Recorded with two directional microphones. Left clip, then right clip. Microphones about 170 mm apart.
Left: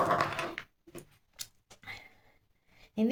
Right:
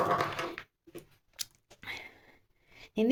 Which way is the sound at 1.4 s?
55° right (ahead or behind).